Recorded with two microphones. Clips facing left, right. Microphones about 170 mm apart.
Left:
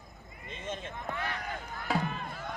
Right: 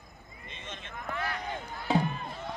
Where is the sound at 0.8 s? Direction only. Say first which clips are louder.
Right 1 dB; 25° left (ahead or behind).